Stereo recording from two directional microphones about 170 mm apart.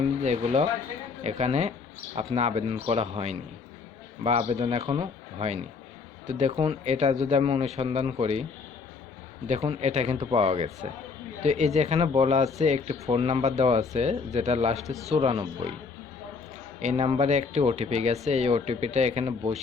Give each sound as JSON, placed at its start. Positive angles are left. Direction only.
{"t": 0.2, "sound": "speech", "side_deg": -40}
{"t": 6.2, "sound": "speech", "side_deg": -45}
{"t": 9.5, "sound": "speech", "side_deg": -40}
{"t": 16.8, "sound": "speech", "side_deg": -35}